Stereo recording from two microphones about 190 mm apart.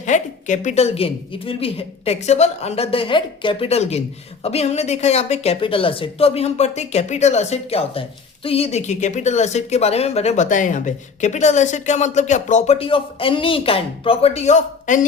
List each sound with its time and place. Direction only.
0.0 s speech: 40° left (ahead or behind)